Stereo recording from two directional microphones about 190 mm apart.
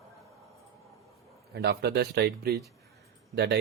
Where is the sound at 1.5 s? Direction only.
55° right (ahead or behind).